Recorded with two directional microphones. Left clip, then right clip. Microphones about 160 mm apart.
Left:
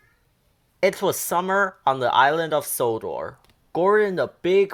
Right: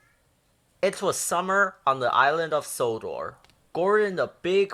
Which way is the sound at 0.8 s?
35° left (ahead or behind).